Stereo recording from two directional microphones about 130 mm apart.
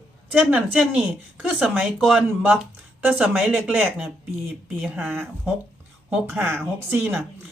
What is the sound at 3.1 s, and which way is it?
A woman's voice, 10° right (ahead or behind).